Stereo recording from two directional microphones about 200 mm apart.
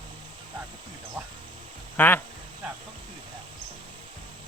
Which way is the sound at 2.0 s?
10° left (ahead or behind).